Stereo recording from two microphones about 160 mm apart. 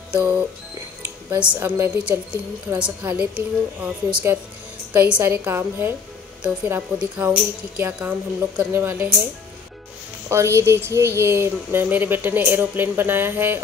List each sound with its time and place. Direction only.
0.1 s speech: 10° right (ahead or behind)
1.5 s speech: 10° right (ahead or behind)
10.3 s speech: 15° right (ahead or behind)